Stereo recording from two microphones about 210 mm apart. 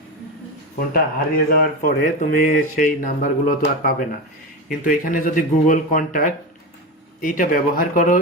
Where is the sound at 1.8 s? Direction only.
40° left (ahead or behind).